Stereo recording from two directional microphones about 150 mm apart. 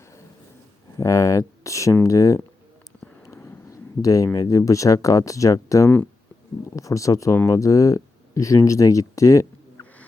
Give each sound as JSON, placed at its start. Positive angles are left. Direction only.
{"t": 0.9, "sound": "speech", "side_deg": 20}